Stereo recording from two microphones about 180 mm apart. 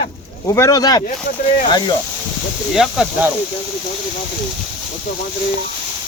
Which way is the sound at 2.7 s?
5° right (ahead or behind).